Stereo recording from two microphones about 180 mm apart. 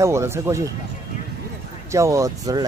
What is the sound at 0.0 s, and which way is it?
Speech, 15° right (ahead or behind).